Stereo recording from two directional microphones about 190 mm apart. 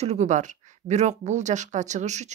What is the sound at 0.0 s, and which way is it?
Speech, 35° right (ahead or behind).